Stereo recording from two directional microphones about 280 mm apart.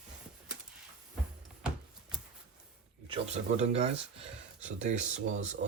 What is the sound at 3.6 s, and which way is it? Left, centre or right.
Speech, right.